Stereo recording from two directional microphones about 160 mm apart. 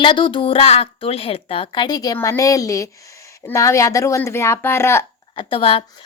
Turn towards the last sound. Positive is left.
turn(degrees=35)  # may be behind; listen again after turning